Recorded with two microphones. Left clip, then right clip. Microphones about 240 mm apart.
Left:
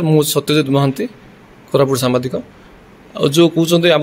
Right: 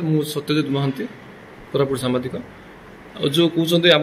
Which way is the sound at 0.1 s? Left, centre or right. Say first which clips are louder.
Left 8 dB; left.